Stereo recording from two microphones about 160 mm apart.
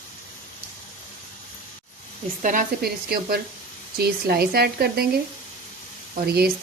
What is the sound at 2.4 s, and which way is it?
A woman's voice, 55° right (ahead or behind).